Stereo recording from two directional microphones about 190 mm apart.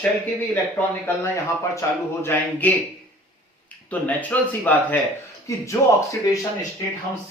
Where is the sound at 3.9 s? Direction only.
10° left (ahead or behind).